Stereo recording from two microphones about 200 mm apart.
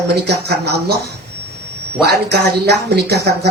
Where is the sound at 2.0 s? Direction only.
55° right (ahead or behind).